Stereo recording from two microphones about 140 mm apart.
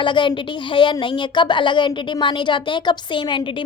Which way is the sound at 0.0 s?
35° left (ahead or behind).